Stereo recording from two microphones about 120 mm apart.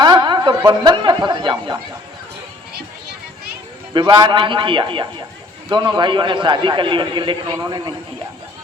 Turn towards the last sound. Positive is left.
turn(degrees=-35)  # may be behind; listen again after turning